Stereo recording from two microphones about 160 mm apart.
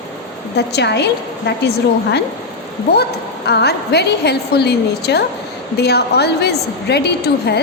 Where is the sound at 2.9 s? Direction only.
90° left.